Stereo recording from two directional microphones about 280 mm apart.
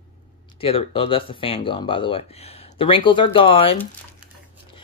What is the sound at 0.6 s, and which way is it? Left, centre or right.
Speech, left.